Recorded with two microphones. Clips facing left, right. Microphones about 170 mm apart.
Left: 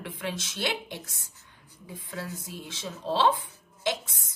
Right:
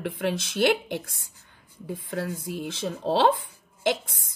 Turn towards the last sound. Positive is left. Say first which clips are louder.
# right 5 dB
turn(degrees=-55)  # may be behind; listen again after turning